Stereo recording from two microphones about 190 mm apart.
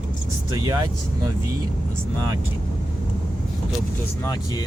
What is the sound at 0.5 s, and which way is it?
Speech, 20° right (ahead or behind).